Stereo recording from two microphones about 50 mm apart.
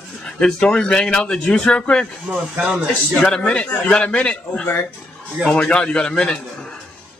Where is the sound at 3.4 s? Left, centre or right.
Left.